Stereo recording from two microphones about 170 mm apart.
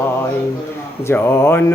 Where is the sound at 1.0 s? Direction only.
15° left (ahead or behind).